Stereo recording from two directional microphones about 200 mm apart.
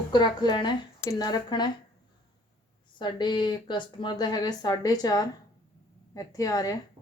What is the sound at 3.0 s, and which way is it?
A woman's voice, 20° left (ahead or behind).